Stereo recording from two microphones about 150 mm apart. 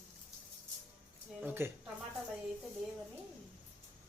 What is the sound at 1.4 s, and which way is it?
Speech, 15° right (ahead or behind).